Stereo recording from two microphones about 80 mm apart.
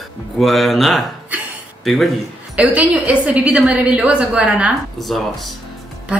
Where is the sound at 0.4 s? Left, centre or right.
Centre.